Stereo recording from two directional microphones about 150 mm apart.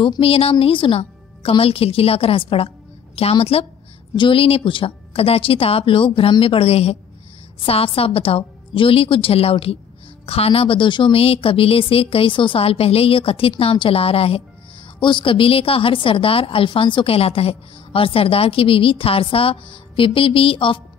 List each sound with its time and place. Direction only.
0.0 s a woman's voice: 35° left (ahead or behind)